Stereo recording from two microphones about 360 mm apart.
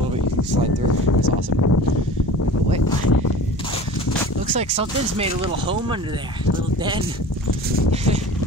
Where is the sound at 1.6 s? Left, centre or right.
Left.